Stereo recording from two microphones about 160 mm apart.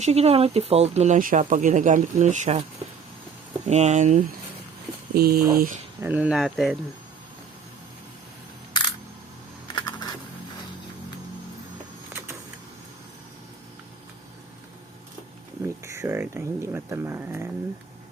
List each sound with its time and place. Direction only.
0.0 s speech: 40° right (ahead or behind)
3.7 s speech: 45° right (ahead or behind)
5.1 s speech: 75° right (ahead or behind)
6.0 s speech: 10° right (ahead or behind)
9.7 s computer keyboard: 25° left (ahead or behind)
15.6 s speech: 15° right (ahead or behind)